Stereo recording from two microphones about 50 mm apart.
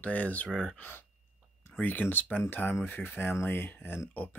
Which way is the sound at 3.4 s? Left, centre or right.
Left.